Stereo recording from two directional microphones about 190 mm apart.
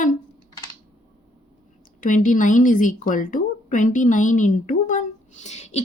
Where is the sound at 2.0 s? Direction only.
45° left (ahead or behind).